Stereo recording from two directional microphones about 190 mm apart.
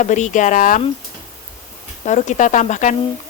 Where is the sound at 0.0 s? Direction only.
40° left (ahead or behind).